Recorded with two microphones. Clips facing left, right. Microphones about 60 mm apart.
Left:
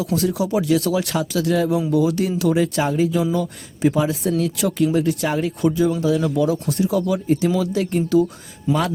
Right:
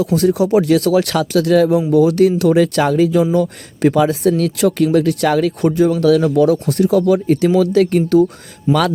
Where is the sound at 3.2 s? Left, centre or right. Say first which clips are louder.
Right 6 dB; right.